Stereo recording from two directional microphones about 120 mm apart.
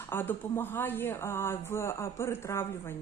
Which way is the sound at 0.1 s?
20° left (ahead or behind).